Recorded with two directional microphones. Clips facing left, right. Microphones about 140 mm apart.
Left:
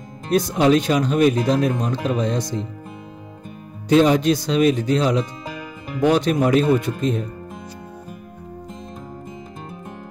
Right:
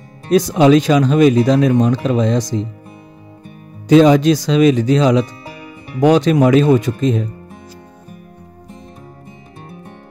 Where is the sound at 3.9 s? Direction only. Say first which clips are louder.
Right 6 dB; 90° right.